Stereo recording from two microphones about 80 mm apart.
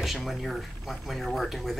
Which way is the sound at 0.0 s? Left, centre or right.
Centre.